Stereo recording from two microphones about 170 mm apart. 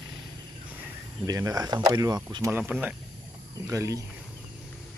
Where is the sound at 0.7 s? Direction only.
10° right (ahead or behind).